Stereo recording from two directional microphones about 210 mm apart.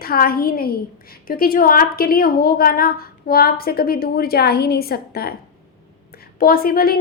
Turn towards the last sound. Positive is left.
turn(degrees=45)  # may be behind; listen again after turning